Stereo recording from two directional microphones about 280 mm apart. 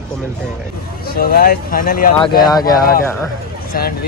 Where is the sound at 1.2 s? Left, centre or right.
Left.